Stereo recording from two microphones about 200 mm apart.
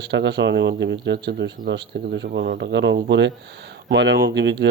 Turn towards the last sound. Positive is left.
turn(degrees=-60)  # may be behind; listen again after turning